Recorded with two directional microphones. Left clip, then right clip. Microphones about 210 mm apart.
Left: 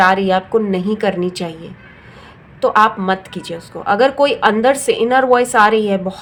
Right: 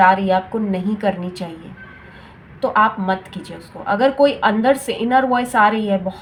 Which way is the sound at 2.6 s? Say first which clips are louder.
Left 4 dB; 40° left (ahead or behind).